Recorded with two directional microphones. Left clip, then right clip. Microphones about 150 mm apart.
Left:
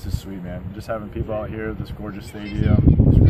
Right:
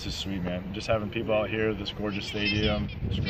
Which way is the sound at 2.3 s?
60° left (ahead or behind).